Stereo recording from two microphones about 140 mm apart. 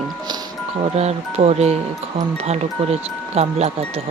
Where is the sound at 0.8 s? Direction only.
50° right (ahead or behind).